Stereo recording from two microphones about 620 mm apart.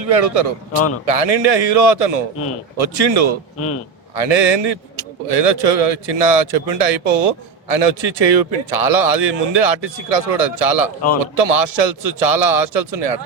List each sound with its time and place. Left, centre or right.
0.0 s a man's voice: right